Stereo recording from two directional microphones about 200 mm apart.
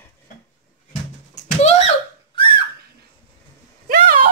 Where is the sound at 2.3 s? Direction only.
25° left (ahead or behind).